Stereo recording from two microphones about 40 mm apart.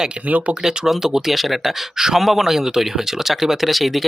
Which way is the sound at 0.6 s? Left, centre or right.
Centre.